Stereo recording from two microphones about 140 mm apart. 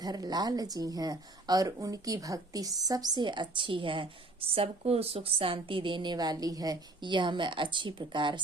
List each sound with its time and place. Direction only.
0.0 s a woman's voice: 30° right (ahead or behind)